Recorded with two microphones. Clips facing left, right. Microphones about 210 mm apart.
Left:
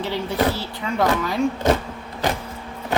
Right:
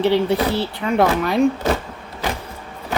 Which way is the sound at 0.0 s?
65° right (ahead or behind).